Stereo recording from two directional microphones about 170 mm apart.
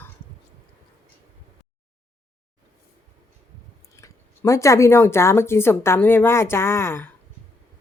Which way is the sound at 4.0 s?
15° left (ahead or behind).